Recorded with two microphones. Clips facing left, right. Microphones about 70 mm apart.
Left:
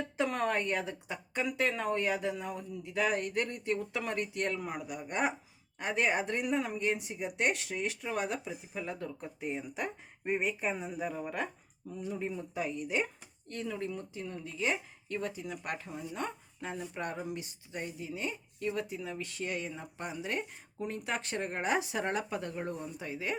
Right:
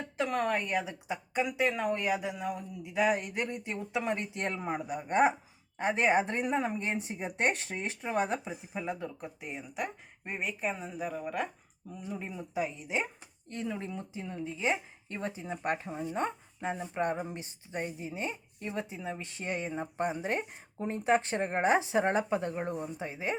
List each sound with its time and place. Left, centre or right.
0.2 s a woman's voice: centre
2.9 s speech: centre
9.0 s a woman's voice: centre; by 23.4 s right